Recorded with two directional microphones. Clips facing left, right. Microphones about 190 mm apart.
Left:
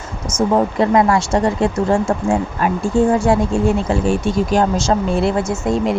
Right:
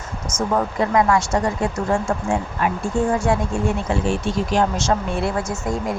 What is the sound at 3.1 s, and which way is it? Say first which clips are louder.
Speech: left 5 dB; 30° left (ahead or behind).